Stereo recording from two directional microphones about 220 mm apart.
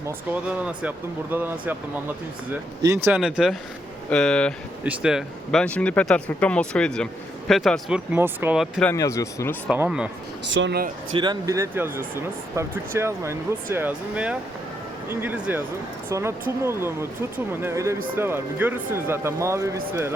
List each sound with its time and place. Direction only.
0.4 s speech: 5° right (ahead or behind)
8.9 s speech: 15° left (ahead or behind)
9.6 s speech: 5° right (ahead or behind)
10.5 s speech: 50° right (ahead or behind)
11.2 s speech: 15° right (ahead or behind)